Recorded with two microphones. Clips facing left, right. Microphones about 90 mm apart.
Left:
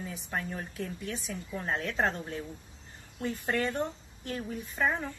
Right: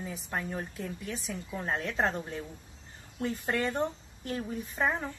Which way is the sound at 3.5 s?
30° right (ahead or behind).